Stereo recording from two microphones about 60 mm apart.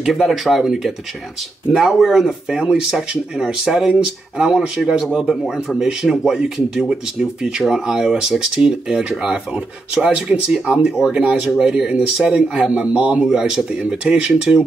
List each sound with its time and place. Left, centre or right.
0.3 s speech: centre
11.4 s speech: centre
13.3 s speech: centre